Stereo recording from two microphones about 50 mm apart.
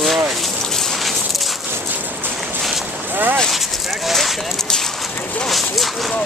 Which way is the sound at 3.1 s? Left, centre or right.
Right.